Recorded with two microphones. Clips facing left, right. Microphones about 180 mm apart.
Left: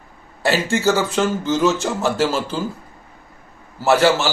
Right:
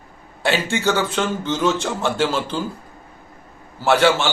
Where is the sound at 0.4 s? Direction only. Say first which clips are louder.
Left 2 dB; 5° left (ahead or behind).